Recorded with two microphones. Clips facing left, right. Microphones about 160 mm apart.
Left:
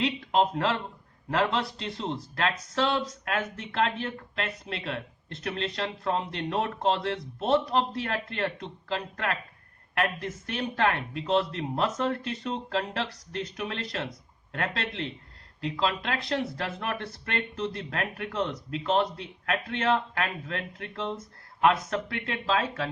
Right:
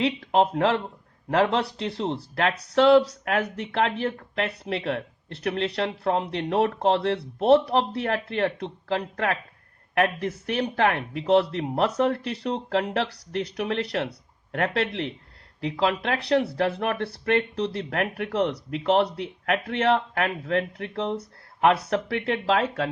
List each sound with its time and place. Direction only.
0.0 s speech: 65° right (ahead or behind)